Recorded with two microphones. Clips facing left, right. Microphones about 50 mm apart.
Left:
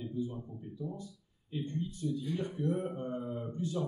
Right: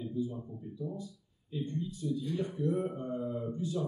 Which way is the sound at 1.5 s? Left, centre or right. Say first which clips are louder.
Right 1 dB; left.